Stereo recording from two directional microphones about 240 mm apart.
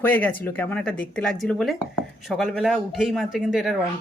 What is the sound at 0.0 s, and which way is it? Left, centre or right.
Speech, centre.